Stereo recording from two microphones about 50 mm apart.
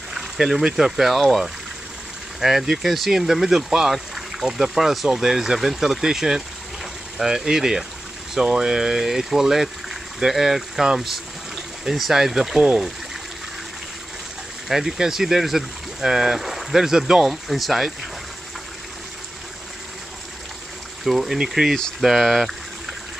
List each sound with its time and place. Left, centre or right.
0.1 s speech: centre
2.4 s speech: centre
14.7 s speech: centre
21.0 s speech: centre